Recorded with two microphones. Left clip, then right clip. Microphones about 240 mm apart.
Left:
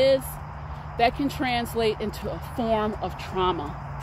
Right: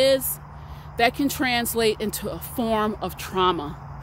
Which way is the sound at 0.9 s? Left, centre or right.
Right.